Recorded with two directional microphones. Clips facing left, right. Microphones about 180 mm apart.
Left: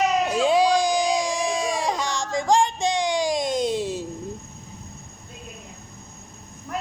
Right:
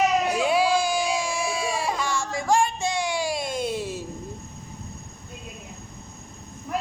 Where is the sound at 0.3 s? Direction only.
10° right (ahead or behind).